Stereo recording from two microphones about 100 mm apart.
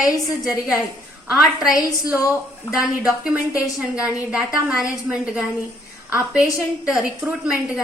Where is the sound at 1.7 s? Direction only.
35° left (ahead or behind).